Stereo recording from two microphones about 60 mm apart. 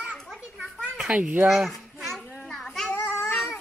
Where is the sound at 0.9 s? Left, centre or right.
Centre.